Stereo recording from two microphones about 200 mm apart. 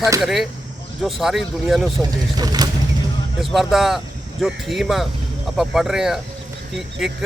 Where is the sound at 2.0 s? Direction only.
20° right (ahead or behind).